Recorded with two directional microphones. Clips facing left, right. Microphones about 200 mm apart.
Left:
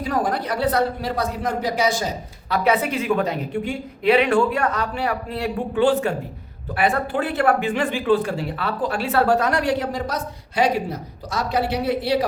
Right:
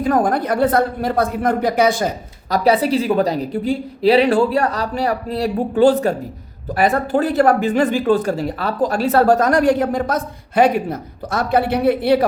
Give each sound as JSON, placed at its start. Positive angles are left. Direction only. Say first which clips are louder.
{"t": 0.0, "sound": "speech", "louder": "right 6 dB", "side_deg": -50}
{"t": 2.5, "sound": "a woman's voice", "louder": "right 5 dB", "side_deg": -35}